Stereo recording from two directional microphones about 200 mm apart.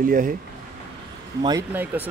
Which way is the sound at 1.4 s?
15° right (ahead or behind).